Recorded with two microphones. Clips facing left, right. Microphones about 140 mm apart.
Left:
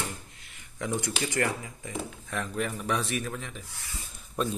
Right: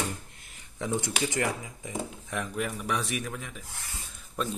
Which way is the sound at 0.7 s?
20° right (ahead or behind).